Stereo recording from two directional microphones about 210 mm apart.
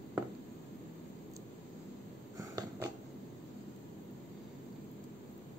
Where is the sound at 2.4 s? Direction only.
15° right (ahead or behind).